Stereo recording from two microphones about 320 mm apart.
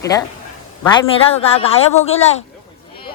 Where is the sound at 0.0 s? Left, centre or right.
Centre.